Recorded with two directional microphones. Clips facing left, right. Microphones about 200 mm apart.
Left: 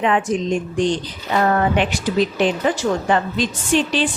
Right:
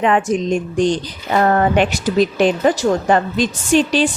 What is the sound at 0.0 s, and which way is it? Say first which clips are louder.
Speech: right 3 dB; 45° right (ahead or behind).